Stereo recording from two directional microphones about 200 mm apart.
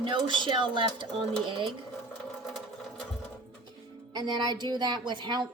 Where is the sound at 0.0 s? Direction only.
25° right (ahead or behind).